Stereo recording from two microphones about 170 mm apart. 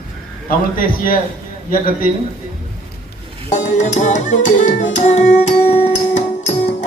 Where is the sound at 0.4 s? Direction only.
55° left (ahead or behind).